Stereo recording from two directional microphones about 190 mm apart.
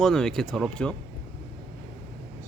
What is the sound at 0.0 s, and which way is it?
Speech, centre (ahead or behind).